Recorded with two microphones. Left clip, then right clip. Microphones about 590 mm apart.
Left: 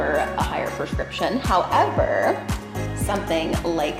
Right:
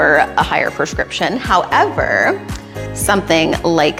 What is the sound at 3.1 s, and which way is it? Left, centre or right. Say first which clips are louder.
Speech: right 10 dB; right.